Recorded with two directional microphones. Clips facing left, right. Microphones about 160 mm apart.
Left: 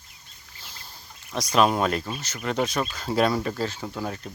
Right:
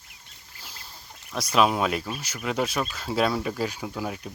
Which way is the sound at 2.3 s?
5° right (ahead or behind).